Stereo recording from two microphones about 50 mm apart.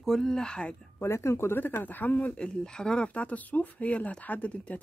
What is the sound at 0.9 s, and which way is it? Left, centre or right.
Speech, left.